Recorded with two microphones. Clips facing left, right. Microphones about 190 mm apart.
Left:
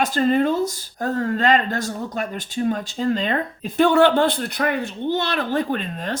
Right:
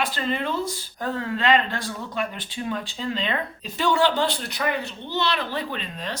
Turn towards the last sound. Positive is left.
turn(degrees=50)  # may be behind; listen again after turning